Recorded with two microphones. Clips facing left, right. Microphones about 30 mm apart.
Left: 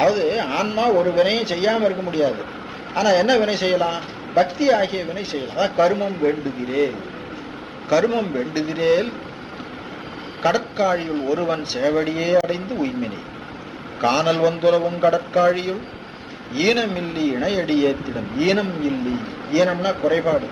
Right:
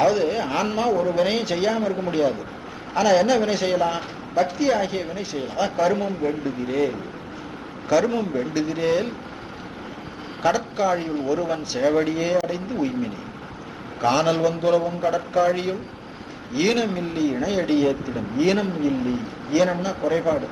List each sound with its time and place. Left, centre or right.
0.0 s a sound: left
0.5 s a man's voice: centre
0.9 s speech: left
1.7 s speech: left
2.9 s a man's voice: centre
10.4 s speech: left
11.8 s a man's voice: centre
14.1 s speech: left
14.4 s speech: left